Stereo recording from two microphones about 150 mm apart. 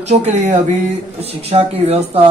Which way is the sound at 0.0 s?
50° right (ahead or behind).